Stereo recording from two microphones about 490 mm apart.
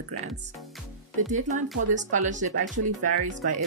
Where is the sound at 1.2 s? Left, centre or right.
Centre.